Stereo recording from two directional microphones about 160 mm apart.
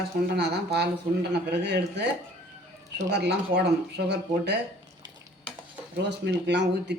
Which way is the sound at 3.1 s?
90° right.